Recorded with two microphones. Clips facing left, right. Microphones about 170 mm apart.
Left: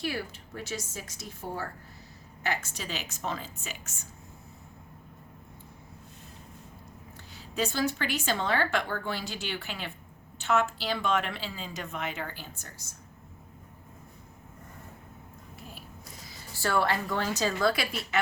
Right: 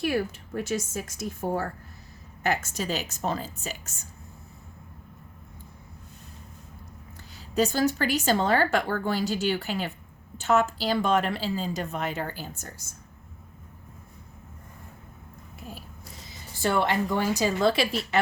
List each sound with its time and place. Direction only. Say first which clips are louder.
0.0 s a woman's voice: right 7 dB; 50° right (ahead or behind)
7.3 s speech: right 6 dB; 40° right (ahead or behind)
16.2 s a woman's voice: right 5 dB; 20° right (ahead or behind)